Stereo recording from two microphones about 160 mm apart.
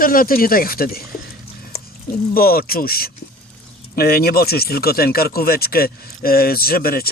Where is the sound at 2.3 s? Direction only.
70° left (ahead or behind).